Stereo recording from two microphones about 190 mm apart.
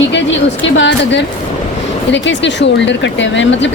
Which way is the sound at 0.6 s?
75° left (ahead or behind).